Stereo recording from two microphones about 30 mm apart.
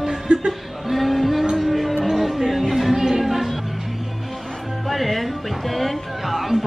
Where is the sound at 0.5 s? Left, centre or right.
Centre.